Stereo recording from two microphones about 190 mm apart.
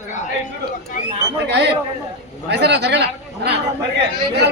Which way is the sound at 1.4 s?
60° right (ahead or behind).